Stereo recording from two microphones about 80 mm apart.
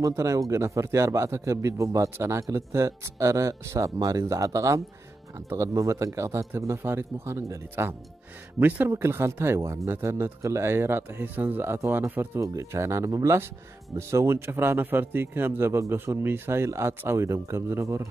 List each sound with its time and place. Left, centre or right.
0.0 s a man's voice: right